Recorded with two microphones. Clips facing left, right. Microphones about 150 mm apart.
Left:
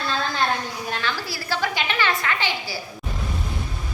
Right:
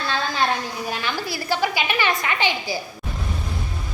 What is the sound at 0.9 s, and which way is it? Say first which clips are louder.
A woman's voice: right 1 dB; 10° right (ahead or behind).